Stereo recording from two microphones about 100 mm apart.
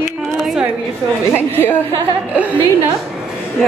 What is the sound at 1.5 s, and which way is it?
Speech, 20° left (ahead or behind).